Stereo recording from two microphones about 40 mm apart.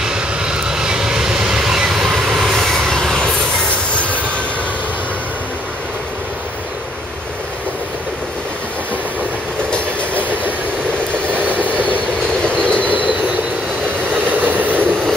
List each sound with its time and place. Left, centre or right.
0.0 s vehicle: right
2.9 s train: centre
3.9 s train: left
11.3 s vehicle: right
12.6 s train: left
14.3 s vehicle: right